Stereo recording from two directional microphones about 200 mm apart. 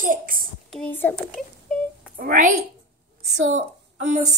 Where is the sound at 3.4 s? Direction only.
35° right (ahead or behind).